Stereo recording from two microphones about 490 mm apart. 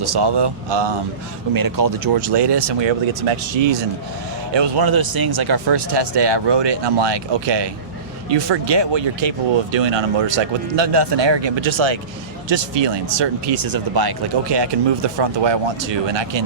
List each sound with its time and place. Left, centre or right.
0.0 s speech: right
1.5 s speech: right